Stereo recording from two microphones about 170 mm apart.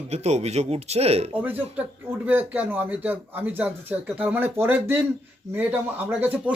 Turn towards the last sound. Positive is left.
turn(degrees=-10)  # may be behind; listen again after turning